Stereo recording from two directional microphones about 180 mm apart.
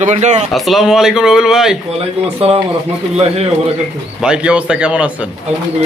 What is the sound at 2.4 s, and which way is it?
Speech, 35° right (ahead or behind).